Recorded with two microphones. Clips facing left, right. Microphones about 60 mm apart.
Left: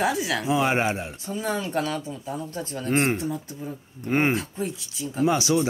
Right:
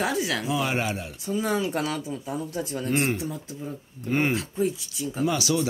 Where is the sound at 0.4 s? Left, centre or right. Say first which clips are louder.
Left 4 dB; left.